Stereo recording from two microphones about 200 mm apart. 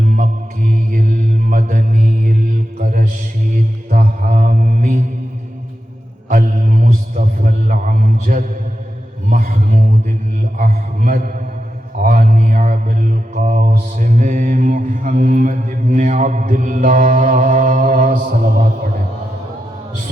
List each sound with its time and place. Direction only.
0.0 s mantra: 40° right (ahead or behind)
6.2 s mantra: 40° right (ahead or behind)
9.3 s a sound: 40° right (ahead or behind)
10.6 s mantra: 40° right (ahead or behind)